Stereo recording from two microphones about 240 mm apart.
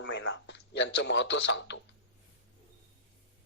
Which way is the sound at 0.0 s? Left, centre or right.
Left.